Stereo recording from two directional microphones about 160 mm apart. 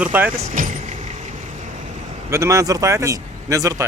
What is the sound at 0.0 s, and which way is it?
Speech, 10° right (ahead or behind).